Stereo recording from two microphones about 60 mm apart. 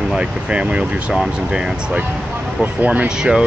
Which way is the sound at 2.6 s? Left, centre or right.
Right.